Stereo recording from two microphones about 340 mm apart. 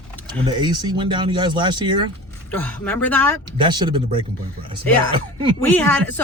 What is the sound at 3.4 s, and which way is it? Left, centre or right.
Speech, centre.